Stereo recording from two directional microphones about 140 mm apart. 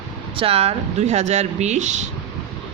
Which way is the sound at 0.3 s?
45° right (ahead or behind).